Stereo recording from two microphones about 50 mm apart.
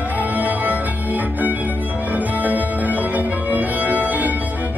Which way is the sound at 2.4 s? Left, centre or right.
Right.